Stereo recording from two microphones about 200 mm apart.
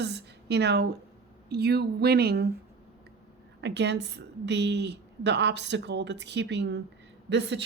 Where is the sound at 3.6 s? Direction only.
60° right (ahead or behind).